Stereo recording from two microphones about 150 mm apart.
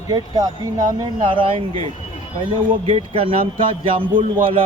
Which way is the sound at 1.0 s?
35° right (ahead or behind).